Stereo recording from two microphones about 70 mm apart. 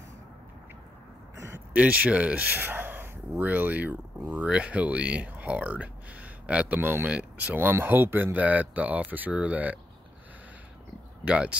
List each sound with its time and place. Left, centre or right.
1.7 s speech: centre
7.1 s speech: centre
7.5 s speech: right
11.2 s speech: centre